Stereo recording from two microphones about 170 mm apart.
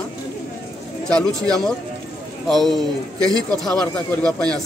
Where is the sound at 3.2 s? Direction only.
20° right (ahead or behind).